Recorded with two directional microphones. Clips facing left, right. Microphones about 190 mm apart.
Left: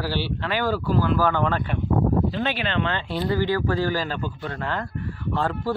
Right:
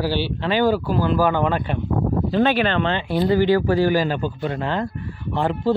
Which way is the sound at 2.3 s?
50° right (ahead or behind).